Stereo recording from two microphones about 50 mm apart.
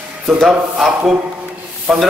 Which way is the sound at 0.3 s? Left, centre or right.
Centre.